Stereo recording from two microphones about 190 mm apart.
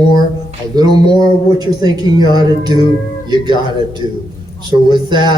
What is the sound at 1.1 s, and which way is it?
Speech, 20° right (ahead or behind).